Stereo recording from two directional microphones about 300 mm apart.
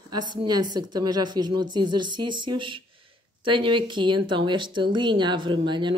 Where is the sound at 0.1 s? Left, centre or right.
Centre.